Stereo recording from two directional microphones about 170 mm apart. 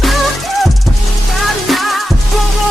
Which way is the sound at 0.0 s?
Centre (ahead or behind).